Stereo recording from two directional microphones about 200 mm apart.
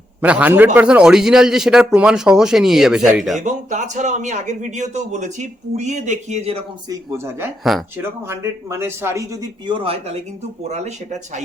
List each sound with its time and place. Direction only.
0.2 s a man's voice: 5° right (ahead or behind)
3.4 s a man's voice: 35° right (ahead or behind)
6.8 s speech: 10° right (ahead or behind)
7.6 s a man's voice: centre (ahead or behind)
8.3 s a man's voice: 15° right (ahead or behind); by 11.4 s 35° right (ahead or behind)